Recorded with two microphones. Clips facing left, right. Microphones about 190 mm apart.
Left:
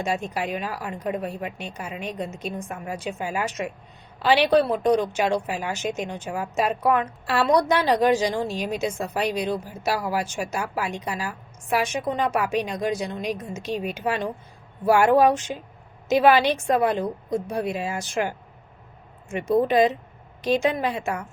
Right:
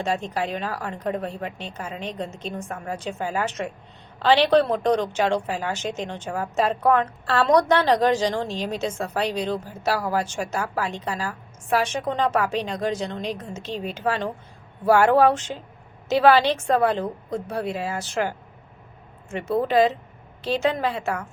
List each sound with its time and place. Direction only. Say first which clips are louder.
0.0 s a woman's voice: right 1 dB; 10° left (ahead or behind)